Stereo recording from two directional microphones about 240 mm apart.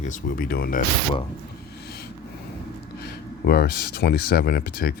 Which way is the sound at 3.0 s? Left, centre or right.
Left.